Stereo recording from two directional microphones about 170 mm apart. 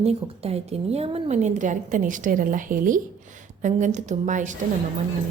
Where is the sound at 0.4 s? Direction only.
35° right (ahead or behind).